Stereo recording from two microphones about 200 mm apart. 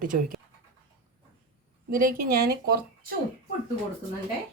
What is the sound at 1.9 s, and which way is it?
Speech, 45° right (ahead or behind).